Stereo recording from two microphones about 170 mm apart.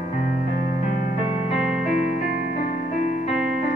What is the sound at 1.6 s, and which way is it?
Music, 5° right (ahead or behind).